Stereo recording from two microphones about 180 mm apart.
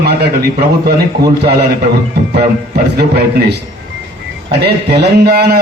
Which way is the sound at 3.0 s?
65° right (ahead or behind).